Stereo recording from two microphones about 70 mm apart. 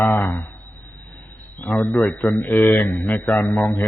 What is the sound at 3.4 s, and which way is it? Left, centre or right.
Speech, left.